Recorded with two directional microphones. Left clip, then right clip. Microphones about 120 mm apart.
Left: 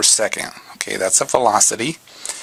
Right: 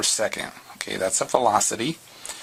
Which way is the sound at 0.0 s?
25° left (ahead or behind).